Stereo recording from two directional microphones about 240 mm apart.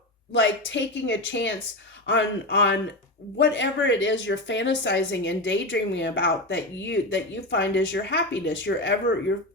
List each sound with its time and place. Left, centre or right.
0.3 s speech: left